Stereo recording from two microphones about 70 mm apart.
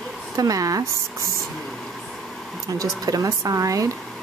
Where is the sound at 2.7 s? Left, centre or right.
Right.